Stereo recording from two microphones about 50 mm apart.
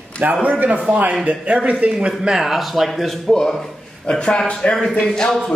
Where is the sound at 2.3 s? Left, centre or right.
Centre.